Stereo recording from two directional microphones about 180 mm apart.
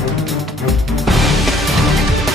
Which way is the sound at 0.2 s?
Centre (ahead or behind).